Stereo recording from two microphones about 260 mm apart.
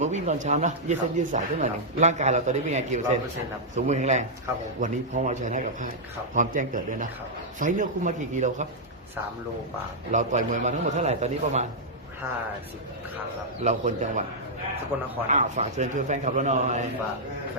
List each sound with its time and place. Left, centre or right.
0.0 s speech: right
10.1 s speech: right
13.7 s speech: right
15.3 s speech: right